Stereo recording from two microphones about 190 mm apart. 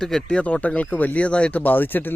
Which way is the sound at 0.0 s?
5° left (ahead or behind).